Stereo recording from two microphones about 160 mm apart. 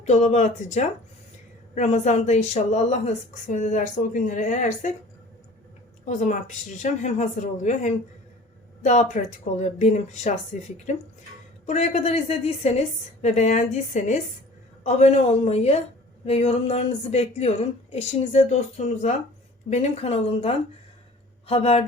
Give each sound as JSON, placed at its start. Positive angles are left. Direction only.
{"t": 0.0, "sound": "a woman's voice", "side_deg": 45}
{"t": 6.1, "sound": "a woman's voice", "side_deg": 50}
{"t": 11.6, "sound": "a woman's voice", "side_deg": 45}